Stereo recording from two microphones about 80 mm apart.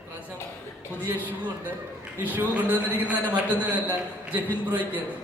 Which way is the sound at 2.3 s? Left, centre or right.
Right.